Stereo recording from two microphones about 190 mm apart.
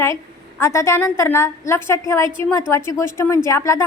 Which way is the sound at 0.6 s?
15° left (ahead or behind).